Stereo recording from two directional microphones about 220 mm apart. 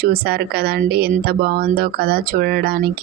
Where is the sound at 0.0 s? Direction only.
45° right (ahead or behind).